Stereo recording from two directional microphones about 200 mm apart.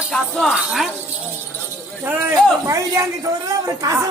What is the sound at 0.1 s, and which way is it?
Speech, centre (ahead or behind).